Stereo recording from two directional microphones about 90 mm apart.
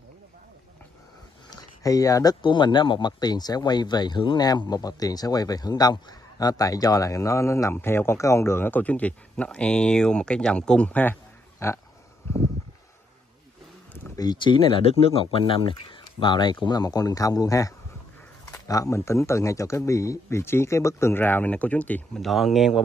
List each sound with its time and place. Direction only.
1.5 s a sound: 45° left (ahead or behind)
2.4 s speech: 60° left (ahead or behind); by 11.1 s 15° left (ahead or behind)
11.6 s speech: 30° left (ahead or behind)
12.2 s a sound: 25° left (ahead or behind)
14.1 s speech: 45° left (ahead or behind)
14.4 s speech: 70° left (ahead or behind); by 22.2 s 15° left (ahead or behind)
22.2 s speech: centre (ahead or behind)